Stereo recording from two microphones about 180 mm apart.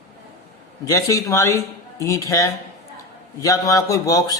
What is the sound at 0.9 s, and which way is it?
A man's voice, 20° left (ahead or behind).